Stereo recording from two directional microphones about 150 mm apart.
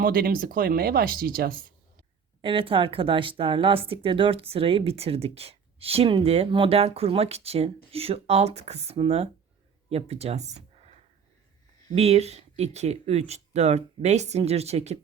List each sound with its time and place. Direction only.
0.0 s speech: 75° right (ahead or behind)
2.4 s speech: 35° right (ahead or behind)